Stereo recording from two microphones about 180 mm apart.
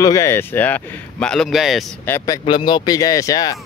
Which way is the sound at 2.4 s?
25° left (ahead or behind).